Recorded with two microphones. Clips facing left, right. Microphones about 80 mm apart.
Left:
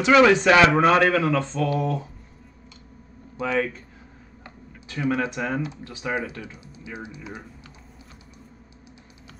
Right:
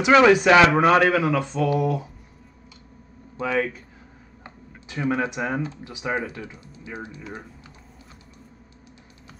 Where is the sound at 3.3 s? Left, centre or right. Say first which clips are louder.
Even; centre.